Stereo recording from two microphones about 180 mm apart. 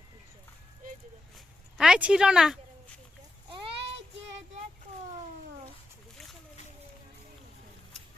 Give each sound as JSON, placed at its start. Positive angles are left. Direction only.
{"t": 1.8, "sound": "speech", "side_deg": -5}
{"t": 3.8, "sound": "child singing", "side_deg": -85}